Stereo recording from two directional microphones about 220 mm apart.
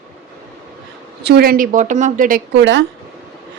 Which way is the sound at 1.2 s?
50° right (ahead or behind).